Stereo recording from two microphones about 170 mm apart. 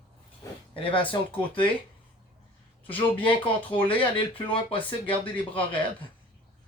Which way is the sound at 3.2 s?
30° left (ahead or behind).